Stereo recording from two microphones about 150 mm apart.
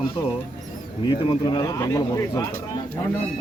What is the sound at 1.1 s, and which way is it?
Speech, 30° left (ahead or behind).